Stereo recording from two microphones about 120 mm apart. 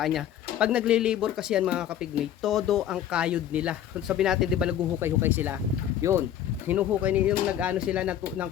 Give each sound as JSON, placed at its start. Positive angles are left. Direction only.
{"t": 0.0, "sound": "speech", "side_deg": 0}
{"t": 4.9, "sound": "speech", "side_deg": -20}
{"t": 6.7, "sound": "speech", "side_deg": -10}